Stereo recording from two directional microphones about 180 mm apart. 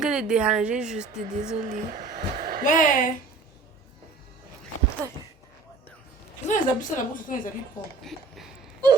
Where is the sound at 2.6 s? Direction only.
45° left (ahead or behind).